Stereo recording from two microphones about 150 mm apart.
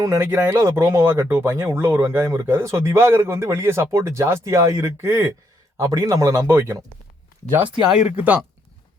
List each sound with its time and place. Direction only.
0.0 s speech: 15° right (ahead or behind)
7.9 s speech: 10° right (ahead or behind)